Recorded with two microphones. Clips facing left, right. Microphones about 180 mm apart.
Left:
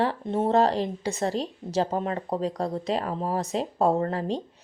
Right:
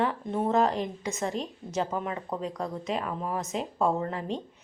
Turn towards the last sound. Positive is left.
turn(degrees=35)  # may be behind; listen again after turning